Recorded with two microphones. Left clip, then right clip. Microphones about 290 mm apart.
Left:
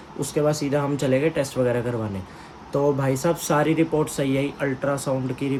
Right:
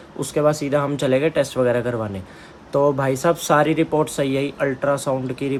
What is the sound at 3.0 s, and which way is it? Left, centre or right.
Speech, centre.